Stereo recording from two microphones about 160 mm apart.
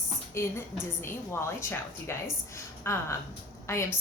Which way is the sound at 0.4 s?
15° left (ahead or behind).